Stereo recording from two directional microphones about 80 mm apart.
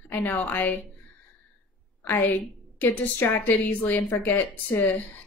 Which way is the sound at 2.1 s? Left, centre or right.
Left.